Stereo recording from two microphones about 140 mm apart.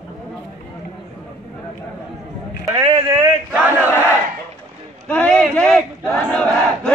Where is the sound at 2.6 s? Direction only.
20° right (ahead or behind).